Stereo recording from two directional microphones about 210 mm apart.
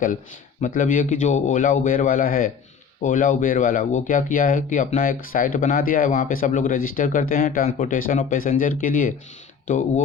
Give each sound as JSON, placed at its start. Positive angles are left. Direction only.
{"t": 0.6, "sound": "speech", "side_deg": 40}